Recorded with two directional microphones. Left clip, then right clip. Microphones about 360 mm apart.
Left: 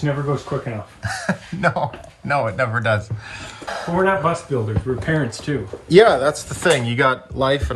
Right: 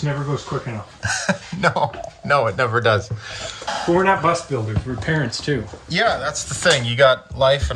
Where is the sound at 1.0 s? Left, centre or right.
Centre.